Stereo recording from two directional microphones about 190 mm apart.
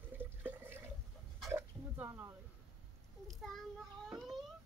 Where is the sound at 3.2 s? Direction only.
Centre (ahead or behind).